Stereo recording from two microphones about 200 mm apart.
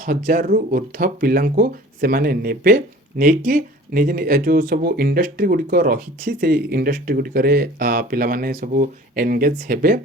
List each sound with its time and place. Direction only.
0.0 s speech: 45° right (ahead or behind)